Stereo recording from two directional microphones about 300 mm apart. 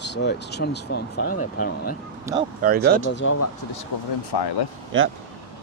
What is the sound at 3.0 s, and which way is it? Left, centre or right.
Speech, left.